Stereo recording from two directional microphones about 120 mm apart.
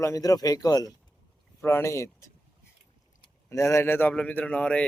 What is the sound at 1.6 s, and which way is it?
Speech, 20° left (ahead or behind).